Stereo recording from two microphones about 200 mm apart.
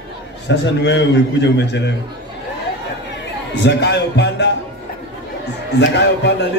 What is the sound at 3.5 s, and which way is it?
Speech, 60° left (ahead or behind).